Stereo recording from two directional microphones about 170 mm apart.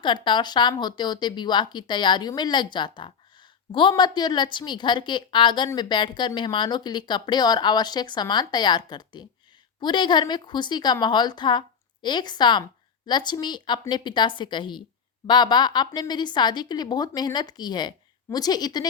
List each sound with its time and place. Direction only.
0.0 s speech: 30° left (ahead or behind)